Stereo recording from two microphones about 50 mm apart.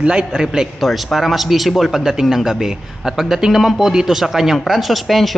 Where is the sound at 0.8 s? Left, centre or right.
Centre.